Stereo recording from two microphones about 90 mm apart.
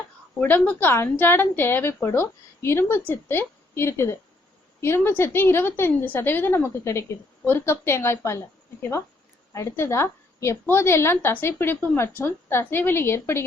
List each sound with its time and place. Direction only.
0.3 s a woman's voice: 15° left (ahead or behind)